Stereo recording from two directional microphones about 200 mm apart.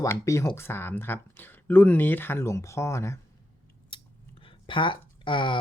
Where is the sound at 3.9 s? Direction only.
25° left (ahead or behind).